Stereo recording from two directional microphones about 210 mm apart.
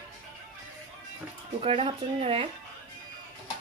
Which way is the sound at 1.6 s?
25° right (ahead or behind).